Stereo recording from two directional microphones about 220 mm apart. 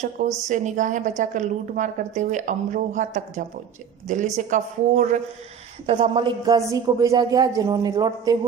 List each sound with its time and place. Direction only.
0.4 s a woman's voice: 35° right (ahead or behind); by 8.4 s 15° right (ahead or behind)